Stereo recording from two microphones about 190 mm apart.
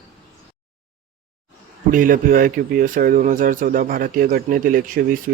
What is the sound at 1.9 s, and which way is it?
Speech, 45° right (ahead or behind).